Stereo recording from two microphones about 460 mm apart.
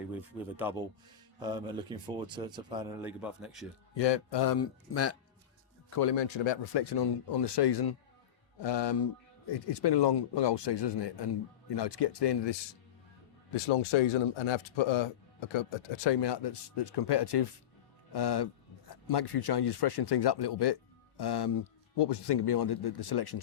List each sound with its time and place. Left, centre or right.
0.1 s speech: centre
3.9 s speech: left
4.6 s speech: left
6.0 s speech: left
13.6 s speech: left